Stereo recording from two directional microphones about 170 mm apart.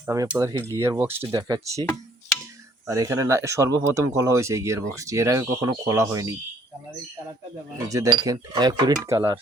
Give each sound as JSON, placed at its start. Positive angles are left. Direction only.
{"t": 0.0, "sound": "cutlery", "side_deg": -20}
{"t": 0.3, "sound": "speech", "side_deg": -15}
{"t": 1.2, "sound": "speech", "side_deg": -25}
{"t": 2.8, "sound": "speech", "side_deg": -15}
{"t": 7.9, "sound": "speech", "side_deg": -20}